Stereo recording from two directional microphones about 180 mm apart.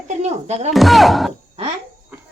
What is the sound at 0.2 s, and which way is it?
Speech, 40° right (ahead or behind).